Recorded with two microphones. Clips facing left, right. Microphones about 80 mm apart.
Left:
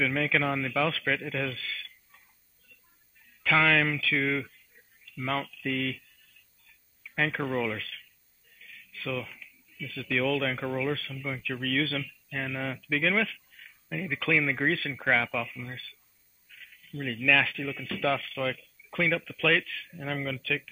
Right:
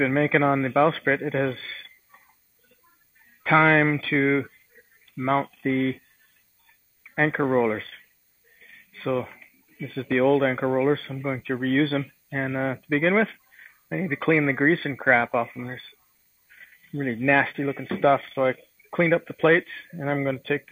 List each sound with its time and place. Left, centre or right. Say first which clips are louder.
0.0 s a man's voice: right 7 dB; right